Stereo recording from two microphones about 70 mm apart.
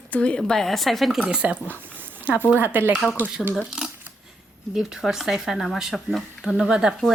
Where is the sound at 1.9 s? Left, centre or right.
Right.